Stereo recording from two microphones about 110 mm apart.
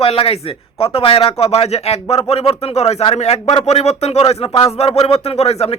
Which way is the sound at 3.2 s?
90° left.